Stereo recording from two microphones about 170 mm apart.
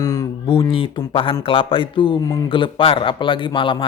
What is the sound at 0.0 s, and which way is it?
A man's voice, 20° left (ahead or behind).